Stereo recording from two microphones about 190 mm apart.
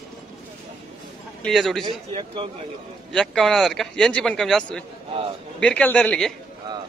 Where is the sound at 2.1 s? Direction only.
25° right (ahead or behind).